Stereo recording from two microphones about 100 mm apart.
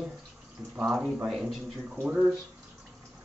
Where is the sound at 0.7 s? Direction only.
5° right (ahead or behind).